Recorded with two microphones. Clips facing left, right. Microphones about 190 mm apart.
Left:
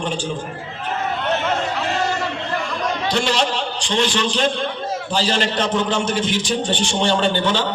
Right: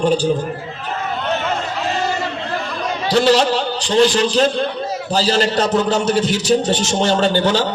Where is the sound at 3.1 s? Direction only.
35° right (ahead or behind).